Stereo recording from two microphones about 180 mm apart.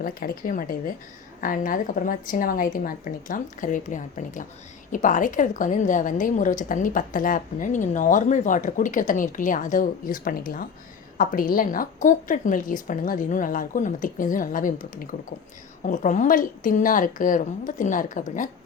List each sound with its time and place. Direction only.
0.0 s a woman's voice: 55° left (ahead or behind)